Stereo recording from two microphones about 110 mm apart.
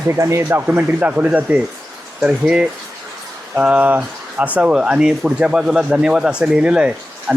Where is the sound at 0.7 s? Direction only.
10° right (ahead or behind).